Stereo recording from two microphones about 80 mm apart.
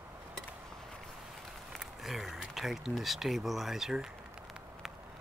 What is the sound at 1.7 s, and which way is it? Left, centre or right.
Speech, centre.